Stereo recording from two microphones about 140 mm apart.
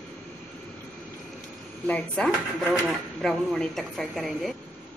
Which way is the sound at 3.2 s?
5° left (ahead or behind).